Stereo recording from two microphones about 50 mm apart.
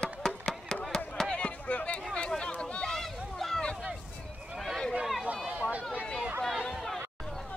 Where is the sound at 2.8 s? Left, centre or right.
Centre.